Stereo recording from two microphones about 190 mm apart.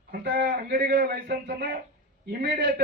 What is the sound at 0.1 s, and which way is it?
A man's voice, 55° right (ahead or behind).